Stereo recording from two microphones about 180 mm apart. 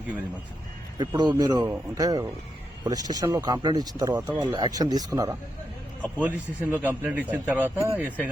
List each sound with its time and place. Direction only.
0.9 s speech: 25° right (ahead or behind)
6.1 s a man's voice: 10° right (ahead or behind)